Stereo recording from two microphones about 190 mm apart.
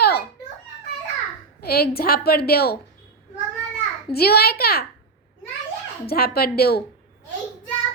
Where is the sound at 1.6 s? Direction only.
55° left (ahead or behind).